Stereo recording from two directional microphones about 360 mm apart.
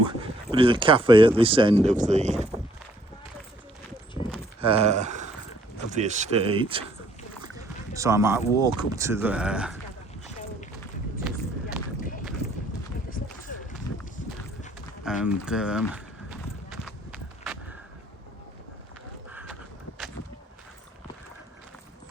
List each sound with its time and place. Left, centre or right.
0.0 s speech: centre
4.6 s speech: centre
7.4 s rowboat: centre
8.5 s speech: centre
11.2 s run: centre
13.1 s run: left
13.9 s a sound: left
15.0 s run: centre
19.3 s a sound: centre